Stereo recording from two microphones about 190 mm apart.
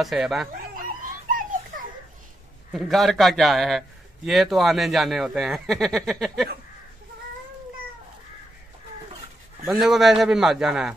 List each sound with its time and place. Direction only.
0.0 s speech: centre (ahead or behind)
0.7 s a sound: 45° right (ahead or behind)
2.7 s speech: centre (ahead or behind)
9.7 s speech: centre (ahead or behind)